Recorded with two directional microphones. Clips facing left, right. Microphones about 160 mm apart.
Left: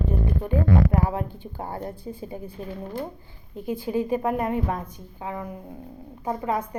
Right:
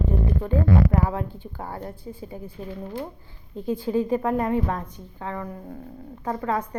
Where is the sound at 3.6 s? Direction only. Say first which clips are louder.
Right 2 dB; 15° left (ahead or behind).